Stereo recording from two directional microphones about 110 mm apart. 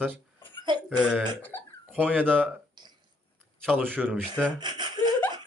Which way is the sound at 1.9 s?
15° right (ahead or behind).